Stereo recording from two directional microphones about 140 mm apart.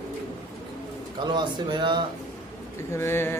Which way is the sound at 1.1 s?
30° right (ahead or behind).